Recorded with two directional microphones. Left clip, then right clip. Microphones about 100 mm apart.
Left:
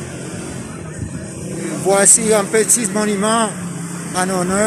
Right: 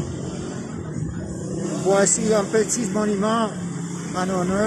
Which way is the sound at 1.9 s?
20° left (ahead or behind).